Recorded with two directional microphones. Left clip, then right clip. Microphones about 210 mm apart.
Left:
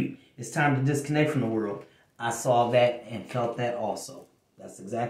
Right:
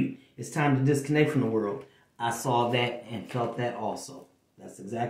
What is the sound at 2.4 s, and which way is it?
Speech, 5° left (ahead or behind).